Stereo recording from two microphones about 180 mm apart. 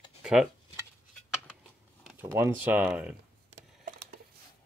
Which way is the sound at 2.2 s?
15° right (ahead or behind).